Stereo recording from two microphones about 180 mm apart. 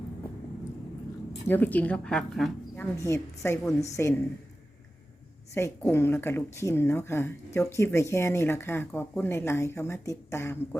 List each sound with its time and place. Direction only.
1.5 s speech: 10° left (ahead or behind)
3.0 s speech: 15° left (ahead or behind)
5.8 s speech: 15° left (ahead or behind)